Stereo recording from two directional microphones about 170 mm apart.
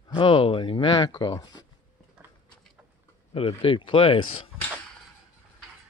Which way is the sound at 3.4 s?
35° left (ahead or behind).